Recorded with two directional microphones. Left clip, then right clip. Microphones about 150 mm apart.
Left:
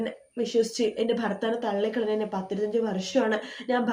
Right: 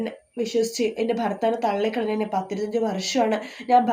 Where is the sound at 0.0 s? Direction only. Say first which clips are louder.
Right 2 dB; 20° right (ahead or behind).